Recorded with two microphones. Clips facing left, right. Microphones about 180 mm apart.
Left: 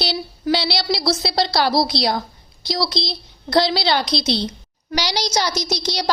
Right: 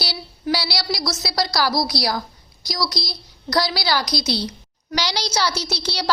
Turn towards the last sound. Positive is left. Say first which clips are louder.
# left 3 dB
turn(degrees=15)  # may be behind; listen again after turning